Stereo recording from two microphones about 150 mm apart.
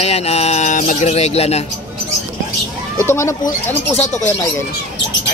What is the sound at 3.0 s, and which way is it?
Speech, 20° left (ahead or behind).